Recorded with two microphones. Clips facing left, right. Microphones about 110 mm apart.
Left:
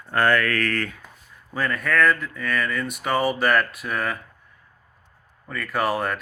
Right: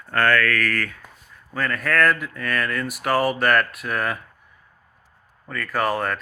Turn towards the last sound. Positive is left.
turn(degrees=5)  # may be behind; listen again after turning